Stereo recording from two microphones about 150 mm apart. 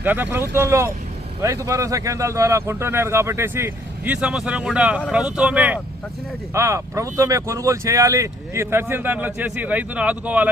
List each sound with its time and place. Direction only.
0.0 s speech: 10° right (ahead or behind)